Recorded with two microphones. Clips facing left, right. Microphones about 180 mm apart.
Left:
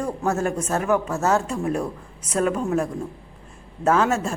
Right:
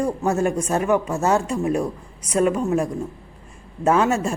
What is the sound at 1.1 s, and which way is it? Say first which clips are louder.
A man's voice: right 1 dB; 15° right (ahead or behind).